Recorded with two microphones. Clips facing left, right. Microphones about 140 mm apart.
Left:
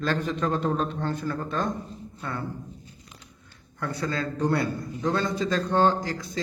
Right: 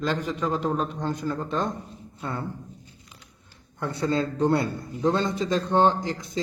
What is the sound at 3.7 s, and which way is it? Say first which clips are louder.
A man's voice: right 4 dB; 25° right (ahead or behind).